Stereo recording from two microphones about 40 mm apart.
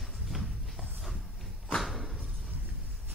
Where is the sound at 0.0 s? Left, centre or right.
Centre.